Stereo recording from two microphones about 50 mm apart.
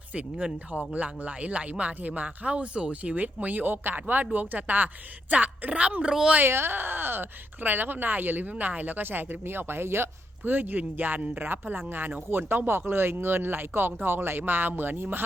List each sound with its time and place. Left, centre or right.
0.1 s speech: right
6.4 s speech: right
10.4 s speech: right